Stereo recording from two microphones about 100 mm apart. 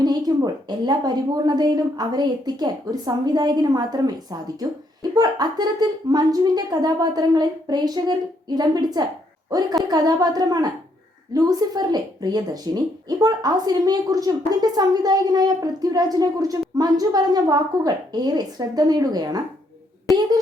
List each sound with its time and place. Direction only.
0.0 s a woman's voice: 40° right (ahead or behind)